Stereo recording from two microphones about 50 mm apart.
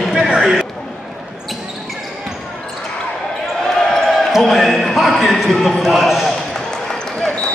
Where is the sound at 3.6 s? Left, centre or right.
Centre.